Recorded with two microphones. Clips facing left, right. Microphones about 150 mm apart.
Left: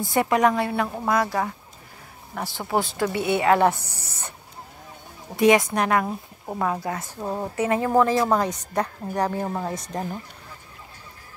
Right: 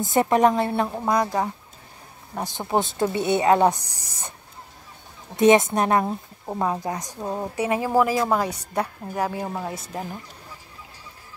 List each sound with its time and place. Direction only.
0.1 s a woman's voice: 25° right (ahead or behind)
5.3 s a woman's voice: 20° right (ahead or behind); by 10.0 s 5° right (ahead or behind)